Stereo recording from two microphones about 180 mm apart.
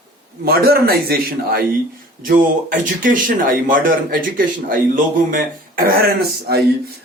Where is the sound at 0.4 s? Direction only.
60° right (ahead or behind).